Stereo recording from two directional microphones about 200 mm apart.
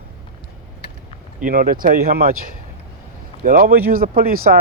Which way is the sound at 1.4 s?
45° right (ahead or behind).